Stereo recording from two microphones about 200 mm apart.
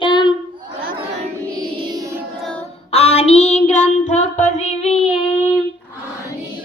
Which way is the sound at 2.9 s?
30° left (ahead or behind).